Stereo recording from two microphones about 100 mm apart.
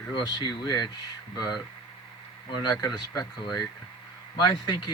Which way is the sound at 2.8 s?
40° left (ahead or behind).